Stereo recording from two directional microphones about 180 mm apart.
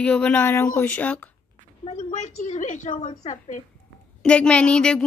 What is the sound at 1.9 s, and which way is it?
A woman's voice, 40° left (ahead or behind).